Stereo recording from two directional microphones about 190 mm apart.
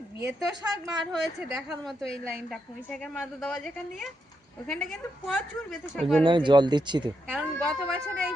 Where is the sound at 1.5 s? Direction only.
Centre (ahead or behind).